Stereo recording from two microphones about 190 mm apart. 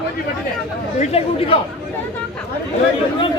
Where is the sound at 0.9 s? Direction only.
35° left (ahead or behind).